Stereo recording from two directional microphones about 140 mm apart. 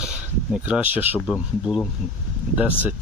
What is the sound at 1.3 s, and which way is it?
Speech, centre (ahead or behind).